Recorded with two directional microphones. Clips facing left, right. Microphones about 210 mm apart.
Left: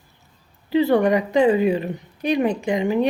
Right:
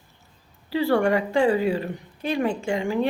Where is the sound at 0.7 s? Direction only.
20° left (ahead or behind).